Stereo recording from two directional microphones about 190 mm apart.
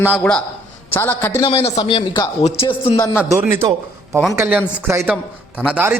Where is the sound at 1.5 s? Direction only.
30° left (ahead or behind).